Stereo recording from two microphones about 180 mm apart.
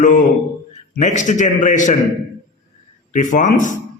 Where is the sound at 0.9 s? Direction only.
40° left (ahead or behind).